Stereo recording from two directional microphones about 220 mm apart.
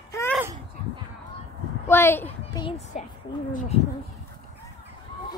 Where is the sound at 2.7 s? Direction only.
30° left (ahead or behind).